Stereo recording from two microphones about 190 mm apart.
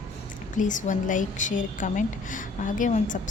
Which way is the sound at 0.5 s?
40° left (ahead or behind).